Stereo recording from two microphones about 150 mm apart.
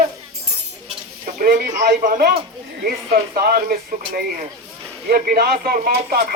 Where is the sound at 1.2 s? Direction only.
65° right (ahead or behind).